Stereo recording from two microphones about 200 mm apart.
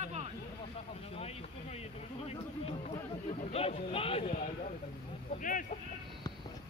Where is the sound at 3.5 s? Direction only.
30° left (ahead or behind).